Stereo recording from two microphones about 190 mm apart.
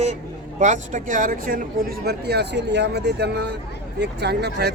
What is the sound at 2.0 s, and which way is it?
A man's voice, 60° right (ahead or behind).